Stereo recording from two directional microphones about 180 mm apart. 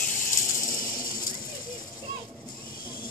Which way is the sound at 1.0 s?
50° left (ahead or behind).